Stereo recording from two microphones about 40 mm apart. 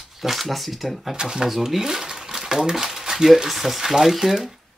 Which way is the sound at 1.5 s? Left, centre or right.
Centre.